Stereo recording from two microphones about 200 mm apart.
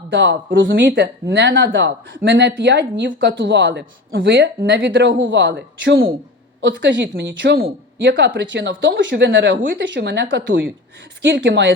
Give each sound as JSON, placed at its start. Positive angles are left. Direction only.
{"t": 0.1, "sound": "speech", "side_deg": -65}